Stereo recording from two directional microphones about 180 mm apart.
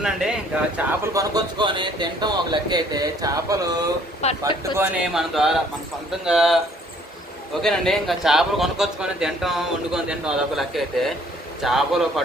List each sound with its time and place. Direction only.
0.0 s speech: 5° right (ahead or behind)
0.8 s speech: 20° right (ahead or behind)
4.2 s a man's voice: 35° left (ahead or behind)
4.8 s a man's voice: 5° right (ahead or behind)
7.6 s a man's voice: centre (ahead or behind)